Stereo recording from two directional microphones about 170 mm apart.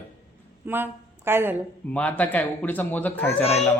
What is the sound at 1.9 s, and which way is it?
Speech, 10° left (ahead or behind).